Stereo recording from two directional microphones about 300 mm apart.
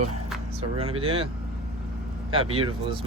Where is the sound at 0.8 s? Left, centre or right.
Centre.